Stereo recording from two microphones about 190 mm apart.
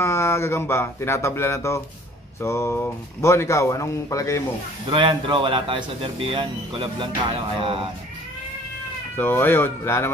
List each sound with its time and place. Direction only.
0.0 s speech: 15° left (ahead or behind)
4.8 s speech: 25° right (ahead or behind)
9.1 s speech: 10° left (ahead or behind)